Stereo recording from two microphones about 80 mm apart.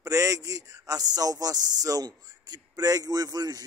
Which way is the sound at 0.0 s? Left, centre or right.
Right.